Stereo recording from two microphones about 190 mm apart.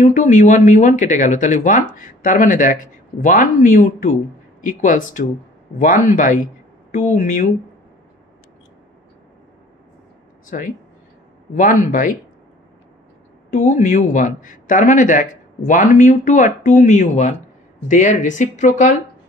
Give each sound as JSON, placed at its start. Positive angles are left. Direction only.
{"t": 0.0, "sound": "speech", "side_deg": 40}
{"t": 10.5, "sound": "speech", "side_deg": 45}
{"t": 13.5, "sound": "speech", "side_deg": 40}